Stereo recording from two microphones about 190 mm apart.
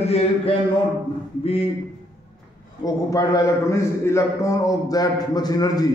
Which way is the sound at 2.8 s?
20° left (ahead or behind).